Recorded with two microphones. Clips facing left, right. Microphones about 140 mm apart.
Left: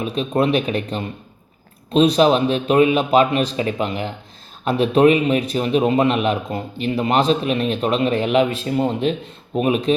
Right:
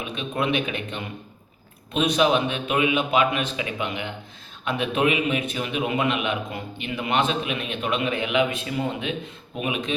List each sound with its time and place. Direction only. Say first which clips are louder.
0.0 s a man's voice: left 8 dB; 35° left (ahead or behind)